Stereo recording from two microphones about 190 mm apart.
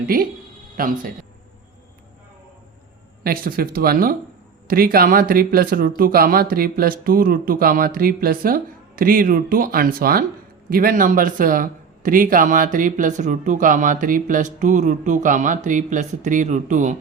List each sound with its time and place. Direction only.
0.1 s speech: 50° right (ahead or behind)
3.2 s speech: 50° right (ahead or behind)